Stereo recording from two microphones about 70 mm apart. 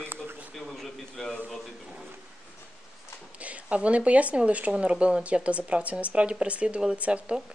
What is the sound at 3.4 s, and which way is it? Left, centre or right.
Speech, centre.